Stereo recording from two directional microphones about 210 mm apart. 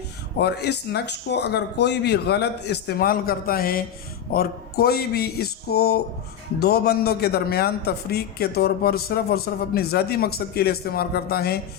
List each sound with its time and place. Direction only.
0.3 s a man's voice: 50° left (ahead or behind)